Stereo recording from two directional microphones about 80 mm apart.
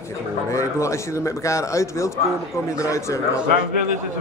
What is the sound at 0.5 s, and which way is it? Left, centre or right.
A man's voice, left.